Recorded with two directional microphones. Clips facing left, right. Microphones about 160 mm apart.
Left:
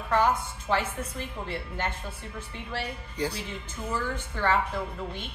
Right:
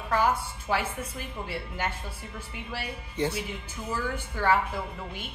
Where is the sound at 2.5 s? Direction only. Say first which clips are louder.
Left 3 dB; 10° right (ahead or behind).